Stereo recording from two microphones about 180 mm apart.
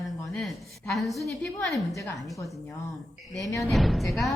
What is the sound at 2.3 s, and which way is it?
Speech, 20° left (ahead or behind).